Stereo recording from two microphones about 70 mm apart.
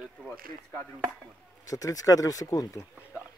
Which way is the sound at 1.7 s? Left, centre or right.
Left.